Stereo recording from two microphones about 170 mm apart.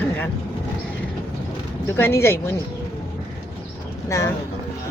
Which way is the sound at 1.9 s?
15° left (ahead or behind).